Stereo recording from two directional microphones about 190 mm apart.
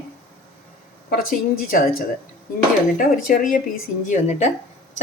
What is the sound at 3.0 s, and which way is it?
A woman's voice, 45° left (ahead or behind).